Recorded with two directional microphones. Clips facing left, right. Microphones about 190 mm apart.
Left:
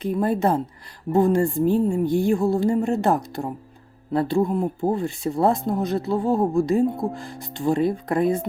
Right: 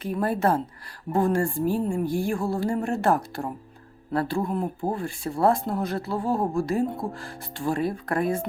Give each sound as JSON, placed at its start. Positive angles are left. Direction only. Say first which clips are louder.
{"t": 0.0, "sound": "speech", "louder": "left 3 dB", "side_deg": 20}